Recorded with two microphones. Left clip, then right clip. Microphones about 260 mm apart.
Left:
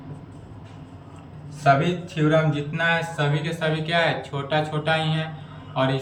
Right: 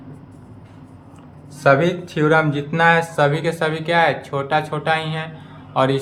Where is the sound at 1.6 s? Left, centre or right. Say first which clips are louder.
Right 4 dB; centre.